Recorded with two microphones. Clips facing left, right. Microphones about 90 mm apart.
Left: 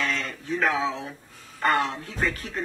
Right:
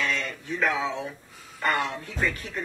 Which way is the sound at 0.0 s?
35° left (ahead or behind).